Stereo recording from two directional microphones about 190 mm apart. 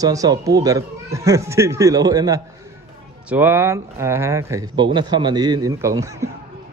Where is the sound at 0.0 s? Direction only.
20° right (ahead or behind).